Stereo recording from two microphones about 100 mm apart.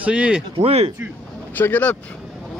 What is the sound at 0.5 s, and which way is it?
Speech, 90° right.